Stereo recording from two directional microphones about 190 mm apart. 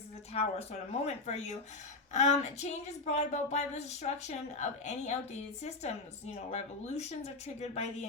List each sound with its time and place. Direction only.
0.3 s a woman's voice: 35° left (ahead or behind)
6.5 s a woman's voice: 35° left (ahead or behind)